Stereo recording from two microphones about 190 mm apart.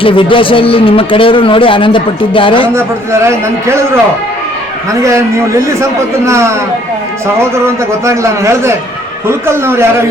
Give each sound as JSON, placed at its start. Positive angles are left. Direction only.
{"t": 0.0, "sound": "a man's voice", "side_deg": 25}
{"t": 2.7, "sound": "a man's voice", "side_deg": -15}
{"t": 5.0, "sound": "a man's voice", "side_deg": -15}
{"t": 7.6, "sound": "a man's voice", "side_deg": -15}